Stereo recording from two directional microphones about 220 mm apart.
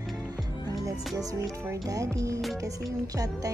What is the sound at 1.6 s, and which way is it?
Speech, 15° right (ahead or behind).